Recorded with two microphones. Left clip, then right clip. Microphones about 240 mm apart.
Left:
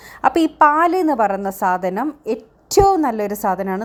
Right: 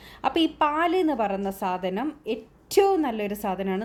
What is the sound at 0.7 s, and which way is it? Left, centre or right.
A woman's voice, left.